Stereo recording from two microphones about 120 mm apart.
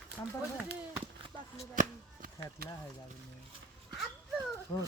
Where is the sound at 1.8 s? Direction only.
90° right.